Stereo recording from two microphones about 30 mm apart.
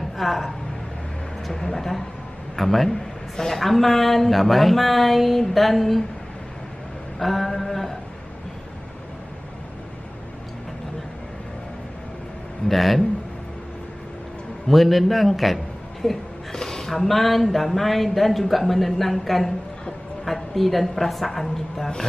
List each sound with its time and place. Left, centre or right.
0.2 s speech: centre
1.5 s a woman's voice: centre
3.3 s a woman's voice: centre
3.6 s speech: centre
7.2 s a woman's voice: centre
12.6 s speech: centre
14.7 s a man's voice: centre
16.5 s a woman's voice: centre